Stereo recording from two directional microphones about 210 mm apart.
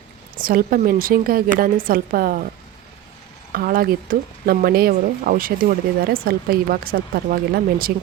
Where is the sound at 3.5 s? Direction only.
45° right (ahead or behind).